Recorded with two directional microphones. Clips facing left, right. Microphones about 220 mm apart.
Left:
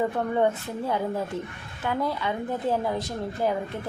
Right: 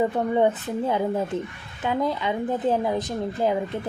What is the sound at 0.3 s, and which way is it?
Speech, 20° right (ahead or behind).